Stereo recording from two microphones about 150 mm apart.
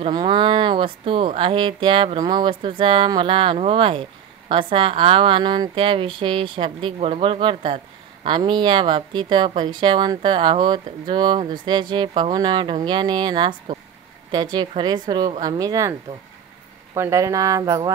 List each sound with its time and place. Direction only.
0.0 s a woman's voice: 30° right (ahead or behind)
16.9 s speech: 20° right (ahead or behind)